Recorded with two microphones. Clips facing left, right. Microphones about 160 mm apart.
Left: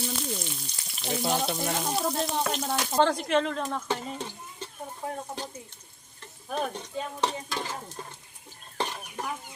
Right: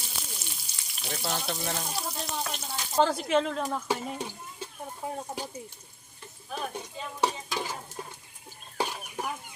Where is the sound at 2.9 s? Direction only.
5° right (ahead or behind).